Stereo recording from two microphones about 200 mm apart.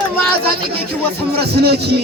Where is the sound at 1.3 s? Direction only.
55° right (ahead or behind).